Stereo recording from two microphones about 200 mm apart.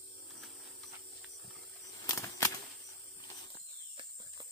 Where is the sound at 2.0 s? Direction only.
15° left (ahead or behind).